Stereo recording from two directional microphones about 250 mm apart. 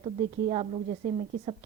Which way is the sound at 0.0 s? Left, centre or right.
Right.